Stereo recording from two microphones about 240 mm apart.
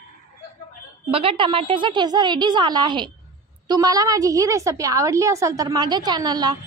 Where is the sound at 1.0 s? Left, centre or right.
Right.